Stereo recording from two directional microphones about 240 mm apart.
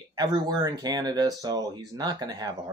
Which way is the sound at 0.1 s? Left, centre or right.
Centre.